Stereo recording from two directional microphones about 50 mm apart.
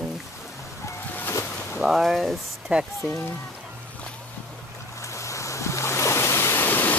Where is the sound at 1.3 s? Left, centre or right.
Left.